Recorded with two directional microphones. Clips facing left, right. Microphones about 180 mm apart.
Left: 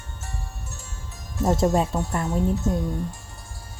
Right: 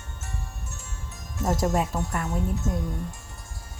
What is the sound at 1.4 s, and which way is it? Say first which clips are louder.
Speech: left 4 dB; 30° left (ahead or behind).